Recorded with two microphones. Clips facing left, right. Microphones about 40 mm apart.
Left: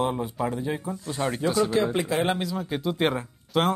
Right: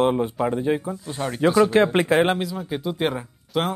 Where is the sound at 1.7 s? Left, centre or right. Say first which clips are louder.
Right 6 dB; right.